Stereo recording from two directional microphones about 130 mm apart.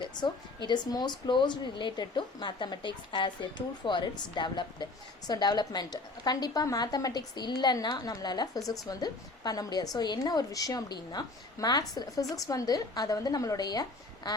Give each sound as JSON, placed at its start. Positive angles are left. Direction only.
{"t": 0.0, "sound": "a woman's voice", "side_deg": 35}
{"t": 14.3, "sound": "quack", "side_deg": 30}